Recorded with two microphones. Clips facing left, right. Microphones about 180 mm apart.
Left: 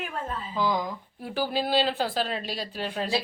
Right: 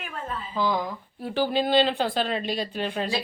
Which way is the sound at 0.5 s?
10° left (ahead or behind).